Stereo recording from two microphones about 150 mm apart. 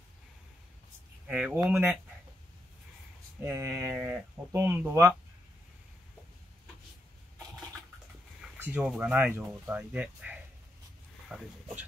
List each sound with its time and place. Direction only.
1.2 s speech: 5° right (ahead or behind)
3.4 s speech: 20° right (ahead or behind)
8.5 s speech: 10° right (ahead or behind)